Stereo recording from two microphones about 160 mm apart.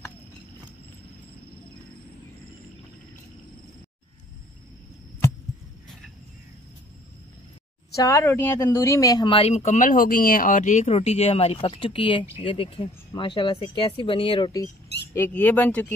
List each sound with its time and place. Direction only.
7.9 s speech: 20° left (ahead or behind)
15.1 s speech: 15° left (ahead or behind)